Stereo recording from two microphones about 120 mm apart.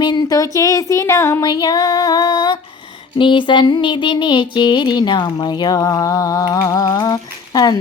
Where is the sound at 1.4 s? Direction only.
35° left (ahead or behind).